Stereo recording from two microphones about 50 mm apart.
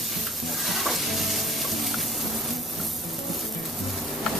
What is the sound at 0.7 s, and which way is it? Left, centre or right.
Stir, centre.